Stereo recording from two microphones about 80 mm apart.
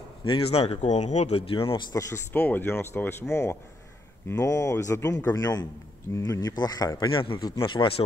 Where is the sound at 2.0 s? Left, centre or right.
Left.